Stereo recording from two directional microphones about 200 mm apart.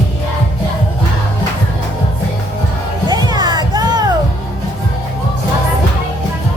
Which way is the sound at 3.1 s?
20° right (ahead or behind).